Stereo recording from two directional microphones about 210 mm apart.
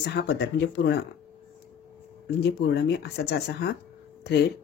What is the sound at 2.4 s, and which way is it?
Speech, 50° left (ahead or behind).